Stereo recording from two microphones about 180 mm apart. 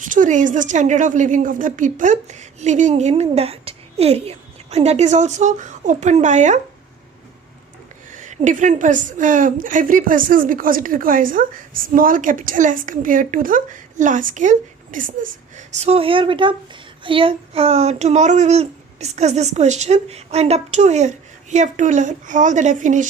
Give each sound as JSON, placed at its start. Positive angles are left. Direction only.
{"t": 0.0, "sound": "a woman's voice", "side_deg": -45}
{"t": 8.1, "sound": "a woman's voice", "side_deg": -40}